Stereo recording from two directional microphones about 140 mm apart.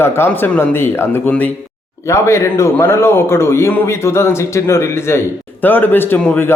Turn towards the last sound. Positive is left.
turn(degrees=15)  # may be behind; listen again after turning